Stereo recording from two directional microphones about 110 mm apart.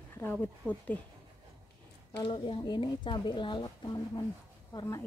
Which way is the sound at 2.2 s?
50° left (ahead or behind).